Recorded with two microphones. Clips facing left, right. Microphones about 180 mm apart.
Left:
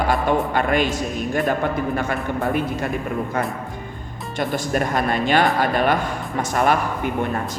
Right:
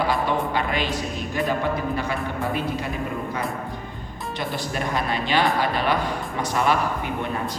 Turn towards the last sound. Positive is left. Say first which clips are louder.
# left 3 dB
turn(degrees=50)  # may be behind; listen again after turning